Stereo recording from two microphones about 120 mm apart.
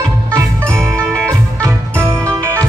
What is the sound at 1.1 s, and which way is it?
Music, 20° right (ahead or behind).